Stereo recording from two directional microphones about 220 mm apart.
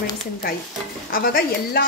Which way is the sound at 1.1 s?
40° left (ahead or behind).